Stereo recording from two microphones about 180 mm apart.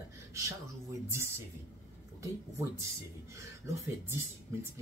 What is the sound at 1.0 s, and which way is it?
Speech, 15° right (ahead or behind).